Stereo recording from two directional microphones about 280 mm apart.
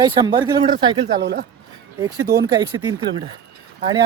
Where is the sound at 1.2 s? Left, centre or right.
Right.